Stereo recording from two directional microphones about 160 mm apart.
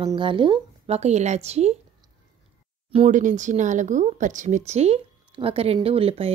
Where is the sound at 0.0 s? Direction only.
30° right (ahead or behind).